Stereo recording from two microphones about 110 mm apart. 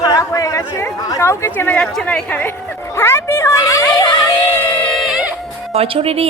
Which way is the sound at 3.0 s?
25° left (ahead or behind).